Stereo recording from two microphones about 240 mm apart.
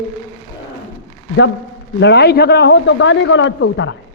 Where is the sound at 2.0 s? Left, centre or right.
Left.